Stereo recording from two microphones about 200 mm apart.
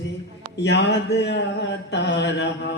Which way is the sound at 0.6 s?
60° left (ahead or behind).